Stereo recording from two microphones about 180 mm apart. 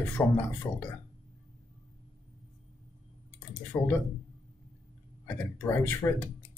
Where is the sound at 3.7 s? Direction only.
10° left (ahead or behind).